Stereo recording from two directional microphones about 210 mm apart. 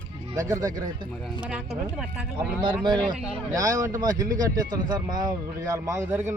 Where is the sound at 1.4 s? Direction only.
5° right (ahead or behind).